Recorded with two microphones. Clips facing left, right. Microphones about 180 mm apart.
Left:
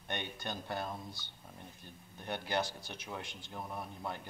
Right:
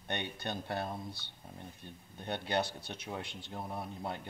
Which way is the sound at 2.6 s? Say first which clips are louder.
Right 2 dB; 60° right (ahead or behind).